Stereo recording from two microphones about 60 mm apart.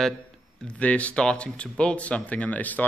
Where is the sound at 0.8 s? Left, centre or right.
Left.